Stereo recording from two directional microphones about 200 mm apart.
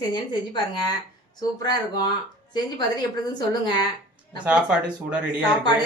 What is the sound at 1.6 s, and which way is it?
Speech, 20° left (ahead or behind).